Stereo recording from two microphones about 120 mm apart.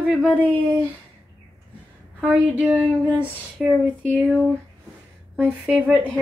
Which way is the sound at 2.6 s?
5° right (ahead or behind).